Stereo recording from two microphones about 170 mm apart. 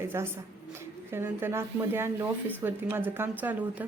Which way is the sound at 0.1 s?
15° right (ahead or behind).